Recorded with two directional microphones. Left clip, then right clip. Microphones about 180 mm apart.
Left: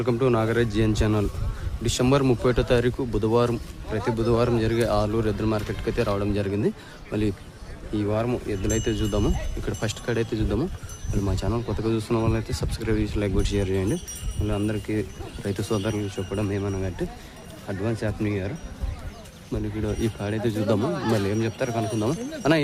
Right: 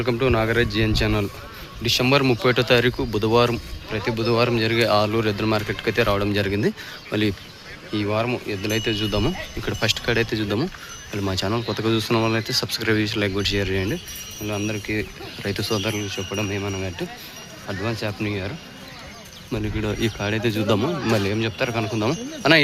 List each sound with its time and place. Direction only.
0.0 s speech: 10° left (ahead or behind)
11.6 s speech: 10° right (ahead or behind)
11.9 s speech: centre (ahead or behind)
19.5 s speech: centre (ahead or behind)
20.8 s speech: 25° right (ahead or behind)
21.2 s speech: 5° left (ahead or behind)